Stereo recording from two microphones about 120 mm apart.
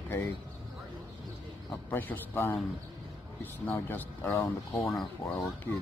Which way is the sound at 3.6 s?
15° left (ahead or behind).